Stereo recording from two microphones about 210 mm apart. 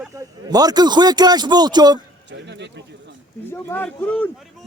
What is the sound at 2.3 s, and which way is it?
Speech, 55° right (ahead or behind).